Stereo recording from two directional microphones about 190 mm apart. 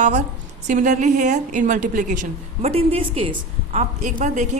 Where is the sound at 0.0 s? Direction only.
40° right (ahead or behind).